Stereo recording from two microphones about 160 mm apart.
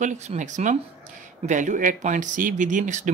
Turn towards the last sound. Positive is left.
turn(degrees=-50)  # may be behind; listen again after turning